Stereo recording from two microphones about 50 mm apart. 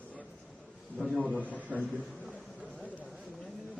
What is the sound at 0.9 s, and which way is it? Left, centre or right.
Speech, centre.